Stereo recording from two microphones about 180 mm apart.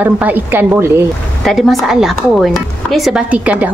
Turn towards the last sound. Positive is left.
turn(degrees=-5)  # may be behind; listen again after turning